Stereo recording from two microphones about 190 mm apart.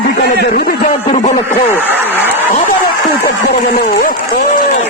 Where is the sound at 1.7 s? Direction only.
10° right (ahead or behind).